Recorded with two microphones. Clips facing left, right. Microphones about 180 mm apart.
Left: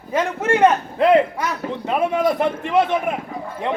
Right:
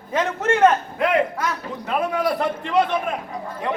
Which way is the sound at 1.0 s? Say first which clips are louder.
Left 6 dB; 30° left (ahead or behind).